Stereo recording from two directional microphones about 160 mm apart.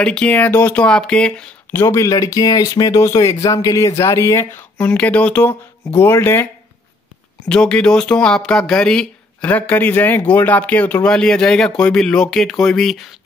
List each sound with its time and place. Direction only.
0.0 s speech: 5° left (ahead or behind)
1.8 s speech: 20° left (ahead or behind)
7.4 s speech: 5° left (ahead or behind)